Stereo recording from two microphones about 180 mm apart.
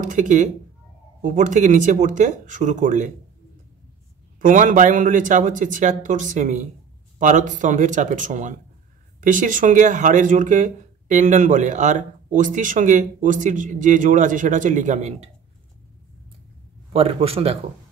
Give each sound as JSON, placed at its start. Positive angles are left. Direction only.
{"t": 0.0, "sound": "speech", "side_deg": -45}
{"t": 4.4, "sound": "speech", "side_deg": -45}
{"t": 16.9, "sound": "a man's voice", "side_deg": -30}